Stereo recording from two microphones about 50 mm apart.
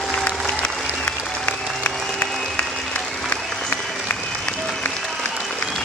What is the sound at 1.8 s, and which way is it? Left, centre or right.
Music, left.